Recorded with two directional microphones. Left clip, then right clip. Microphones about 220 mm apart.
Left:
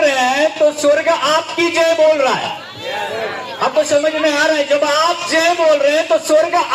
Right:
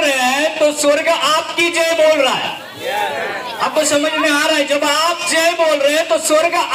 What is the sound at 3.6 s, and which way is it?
A man's voice, 45° right (ahead or behind).